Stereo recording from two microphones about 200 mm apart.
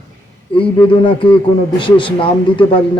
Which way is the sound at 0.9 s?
25° left (ahead or behind).